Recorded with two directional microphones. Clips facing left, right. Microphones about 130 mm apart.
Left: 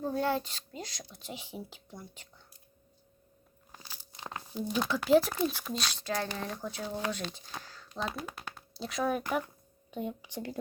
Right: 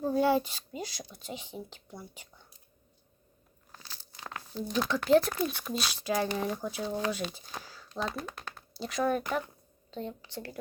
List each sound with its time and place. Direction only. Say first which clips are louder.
0.0 s speech: right 5 dB; 5° right (ahead or behind)
3.7 s crunch: even; 10° left (ahead or behind)
4.2 s crumpling: left 1 dB; 25° left (ahead or behind)
4.5 s speech: right 1 dB; 5° left (ahead or behind)
6.8 s speech: right 3 dB; 10° left (ahead or behind)
7.1 s speech: right 3 dB; 5° right (ahead or behind); by 10.6 s 15° left (ahead or behind)